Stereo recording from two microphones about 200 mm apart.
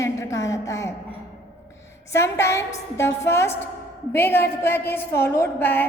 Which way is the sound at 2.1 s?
15° left (ahead or behind).